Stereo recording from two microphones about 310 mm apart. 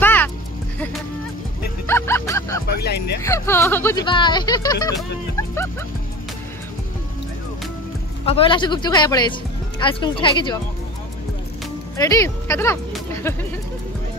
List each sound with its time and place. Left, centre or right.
0.0 s music: centre
1.9 s music: centre
2.8 s speech: left
3.2 s speech: centre
8.3 s speech: centre
12.0 s speech: centre